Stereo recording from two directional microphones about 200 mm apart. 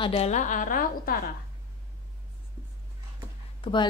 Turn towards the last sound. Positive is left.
turn(degrees=25)  # may be behind; listen again after turning